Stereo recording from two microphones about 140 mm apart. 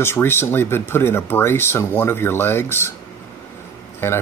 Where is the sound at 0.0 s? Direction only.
15° left (ahead or behind).